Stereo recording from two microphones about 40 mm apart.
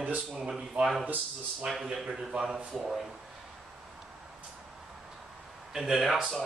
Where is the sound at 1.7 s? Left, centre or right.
Centre.